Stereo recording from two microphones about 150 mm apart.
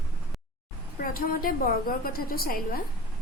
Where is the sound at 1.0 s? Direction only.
70° left (ahead or behind).